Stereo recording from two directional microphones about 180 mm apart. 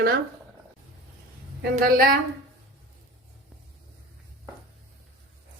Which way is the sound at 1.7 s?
55° right (ahead or behind).